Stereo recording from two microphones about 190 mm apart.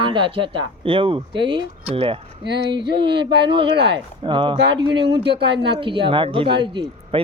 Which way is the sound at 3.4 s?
25° right (ahead or behind).